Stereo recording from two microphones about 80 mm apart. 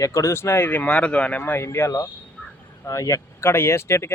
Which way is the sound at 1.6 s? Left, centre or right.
Left.